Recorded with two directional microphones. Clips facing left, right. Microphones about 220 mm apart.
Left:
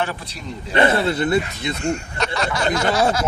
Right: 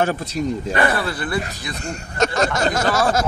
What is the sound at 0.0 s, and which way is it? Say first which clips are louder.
Speech: right 6 dB; 45° right (ahead or behind).